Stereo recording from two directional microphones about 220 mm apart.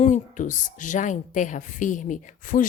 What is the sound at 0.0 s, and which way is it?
A woman's voice, 35° left (ahead or behind).